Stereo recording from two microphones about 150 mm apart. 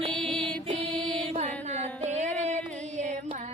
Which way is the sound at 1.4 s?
50° right (ahead or behind).